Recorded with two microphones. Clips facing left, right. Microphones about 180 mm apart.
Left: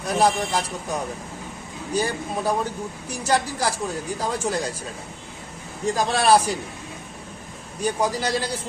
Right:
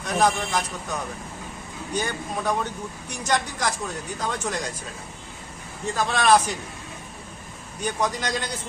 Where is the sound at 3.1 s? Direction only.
30° left (ahead or behind).